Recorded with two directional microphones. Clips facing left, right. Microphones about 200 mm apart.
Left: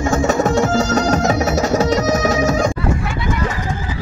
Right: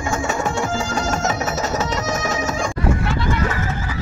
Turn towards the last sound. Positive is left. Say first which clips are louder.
# left 1 dB
turn(degrees=15)  # may be behind; listen again after turning